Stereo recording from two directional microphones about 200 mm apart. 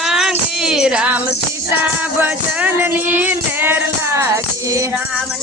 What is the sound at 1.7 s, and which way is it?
Speech, 10° right (ahead or behind).